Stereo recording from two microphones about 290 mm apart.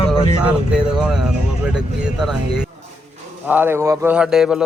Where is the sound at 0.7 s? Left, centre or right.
Centre.